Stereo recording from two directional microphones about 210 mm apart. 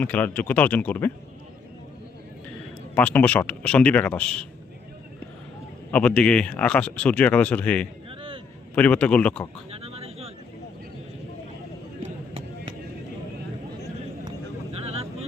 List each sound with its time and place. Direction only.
0.0 s speech: 10° left (ahead or behind)
2.9 s speech: 5° left (ahead or behind)
5.9 s speech: 5° left (ahead or behind)
8.1 s a sound: 25° right (ahead or behind)
8.7 s speech: 5° left (ahead or behind)
9.6 s a sound: 30° right (ahead or behind)
14.3 s vehicle: 30° right (ahead or behind)